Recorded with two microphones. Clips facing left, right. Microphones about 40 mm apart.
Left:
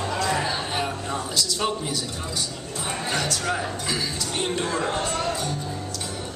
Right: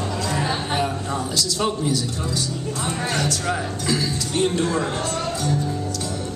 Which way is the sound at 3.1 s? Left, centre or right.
Centre.